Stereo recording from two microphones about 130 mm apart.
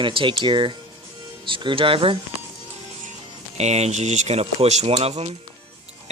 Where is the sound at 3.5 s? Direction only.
60° right (ahead or behind).